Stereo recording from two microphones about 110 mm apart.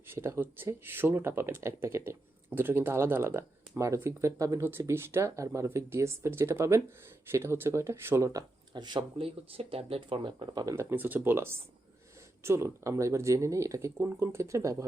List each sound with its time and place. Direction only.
0.1 s speech: 25° right (ahead or behind)
8.7 s speech: 45° right (ahead or behind)
9.1 s speech: 60° right (ahead or behind); by 10.8 s 40° right (ahead or behind)
10.8 s speech: 20° right (ahead or behind)